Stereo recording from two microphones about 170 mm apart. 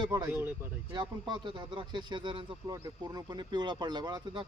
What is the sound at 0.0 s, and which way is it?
Speech, 25° right (ahead or behind).